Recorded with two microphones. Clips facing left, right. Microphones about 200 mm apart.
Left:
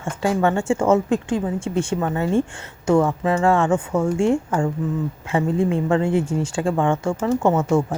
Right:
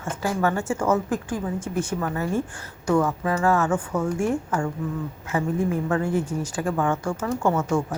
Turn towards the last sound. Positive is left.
turn(degrees=25)  # may be behind; listen again after turning